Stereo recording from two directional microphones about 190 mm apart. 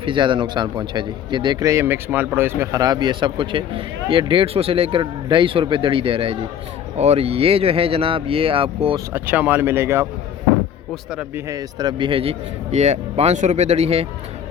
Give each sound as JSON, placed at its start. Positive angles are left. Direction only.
{"t": 0.0, "sound": "a man's voice", "side_deg": -25}
{"t": 9.1, "sound": "speech", "side_deg": -10}
{"t": 11.1, "sound": "speech", "side_deg": -5}
{"t": 11.4, "sound": "a man's voice", "side_deg": -20}